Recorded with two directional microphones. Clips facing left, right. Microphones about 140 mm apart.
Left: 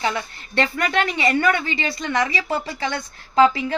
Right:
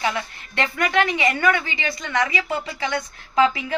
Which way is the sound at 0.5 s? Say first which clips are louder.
Even; 35° left (ahead or behind).